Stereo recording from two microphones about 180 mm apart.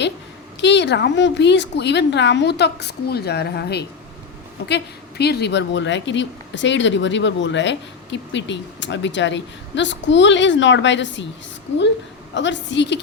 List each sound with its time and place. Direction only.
0.6 s a woman's voice: 75° left (ahead or behind); by 11.3 s 90° left
12.3 s a woman's voice: 85° left